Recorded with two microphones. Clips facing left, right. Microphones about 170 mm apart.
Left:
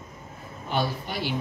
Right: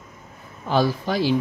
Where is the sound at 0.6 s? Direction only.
90° right.